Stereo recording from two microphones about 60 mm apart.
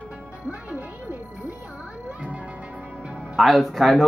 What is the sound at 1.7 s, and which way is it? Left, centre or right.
Music, centre.